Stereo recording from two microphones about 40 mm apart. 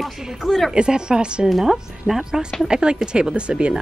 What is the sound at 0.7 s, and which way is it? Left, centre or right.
Speech, right.